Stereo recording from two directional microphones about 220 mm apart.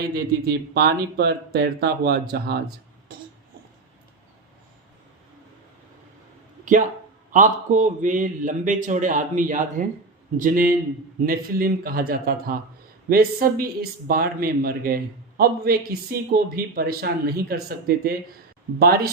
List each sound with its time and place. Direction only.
0.0 s a man's voice: 45° right (ahead or behind)
7.3 s a man's voice: 35° right (ahead or behind)